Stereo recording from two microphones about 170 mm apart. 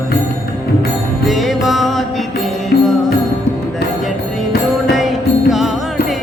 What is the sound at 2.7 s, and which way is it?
Music, 65° left (ahead or behind).